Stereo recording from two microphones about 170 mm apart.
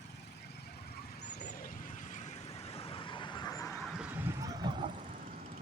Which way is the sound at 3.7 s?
Centre (ahead or behind).